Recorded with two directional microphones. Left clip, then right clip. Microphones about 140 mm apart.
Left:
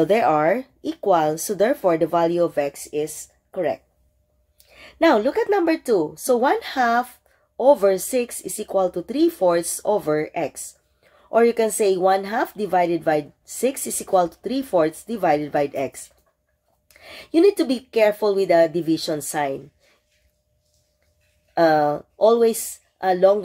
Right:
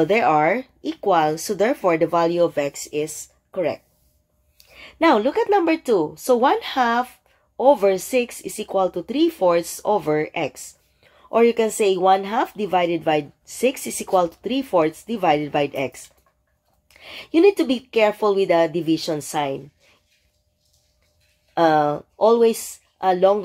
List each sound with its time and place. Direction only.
0.0 s speech: 10° right (ahead or behind)
21.5 s speech: 15° right (ahead or behind)